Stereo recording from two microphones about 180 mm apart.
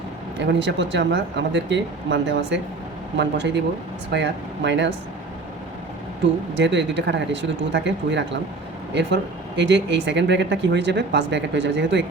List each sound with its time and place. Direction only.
0.3 s speech: 80° right
6.6 s speech: 80° right
9.6 s speech: 80° right